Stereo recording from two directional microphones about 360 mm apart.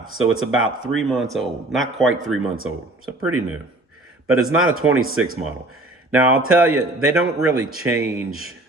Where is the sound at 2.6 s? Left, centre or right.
Right.